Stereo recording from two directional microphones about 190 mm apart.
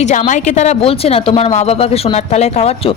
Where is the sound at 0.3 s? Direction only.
40° left (ahead or behind).